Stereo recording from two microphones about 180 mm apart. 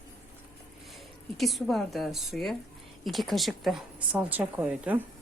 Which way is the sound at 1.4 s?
Centre (ahead or behind).